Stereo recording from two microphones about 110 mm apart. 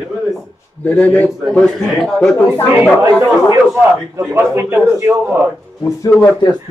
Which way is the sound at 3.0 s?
25° right (ahead or behind).